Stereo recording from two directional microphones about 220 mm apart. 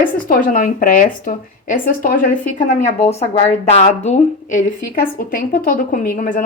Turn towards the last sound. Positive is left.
turn(degrees=35)  # may be behind; listen again after turning